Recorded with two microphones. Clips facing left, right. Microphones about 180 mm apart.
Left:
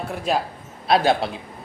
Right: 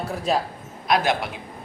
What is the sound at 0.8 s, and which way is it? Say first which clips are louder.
Speech: left 3 dB; 30° left (ahead or behind).